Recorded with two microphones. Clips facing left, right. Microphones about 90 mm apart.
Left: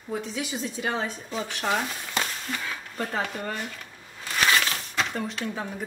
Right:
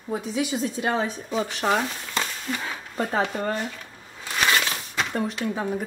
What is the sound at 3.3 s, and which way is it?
Speech, 35° right (ahead or behind).